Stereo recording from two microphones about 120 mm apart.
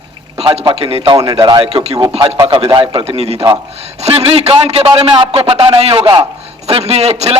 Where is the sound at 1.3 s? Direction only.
35° right (ahead or behind).